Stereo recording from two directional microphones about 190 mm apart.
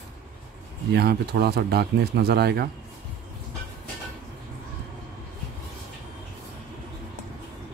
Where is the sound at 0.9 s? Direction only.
60° right (ahead or behind).